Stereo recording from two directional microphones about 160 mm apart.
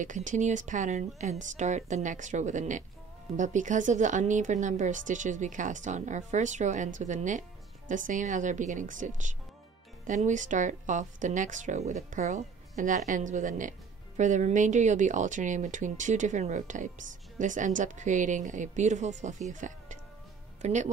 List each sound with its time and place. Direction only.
0.0 s speech: 50° right (ahead or behind)